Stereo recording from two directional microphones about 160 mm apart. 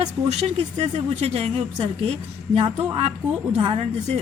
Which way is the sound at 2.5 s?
35° right (ahead or behind).